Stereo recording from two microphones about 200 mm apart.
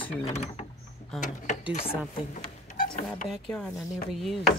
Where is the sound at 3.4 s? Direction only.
Centre (ahead or behind).